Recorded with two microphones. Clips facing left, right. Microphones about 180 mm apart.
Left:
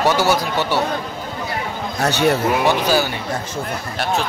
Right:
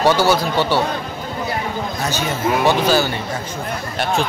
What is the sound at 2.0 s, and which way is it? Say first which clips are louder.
Speech: left 9 dB; 70° left (ahead or behind).